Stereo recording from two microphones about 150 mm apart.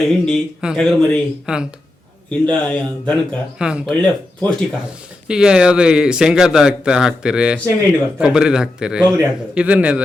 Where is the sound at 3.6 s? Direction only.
5° right (ahead or behind).